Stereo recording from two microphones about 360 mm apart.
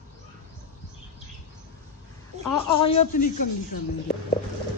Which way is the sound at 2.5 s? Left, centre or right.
Centre.